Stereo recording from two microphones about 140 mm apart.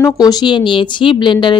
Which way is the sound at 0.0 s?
30° left (ahead or behind).